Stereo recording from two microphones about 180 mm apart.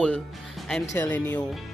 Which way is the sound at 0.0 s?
5° left (ahead or behind).